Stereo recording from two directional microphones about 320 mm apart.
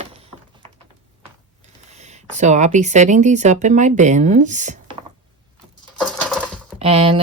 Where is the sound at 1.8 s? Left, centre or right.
Right.